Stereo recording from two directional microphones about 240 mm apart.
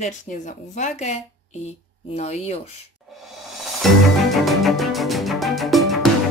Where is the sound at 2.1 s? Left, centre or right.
Left.